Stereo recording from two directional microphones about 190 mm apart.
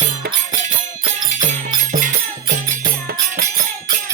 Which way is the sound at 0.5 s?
40° right (ahead or behind).